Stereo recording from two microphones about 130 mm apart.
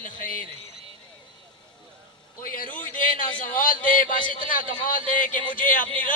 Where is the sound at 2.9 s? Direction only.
90° left.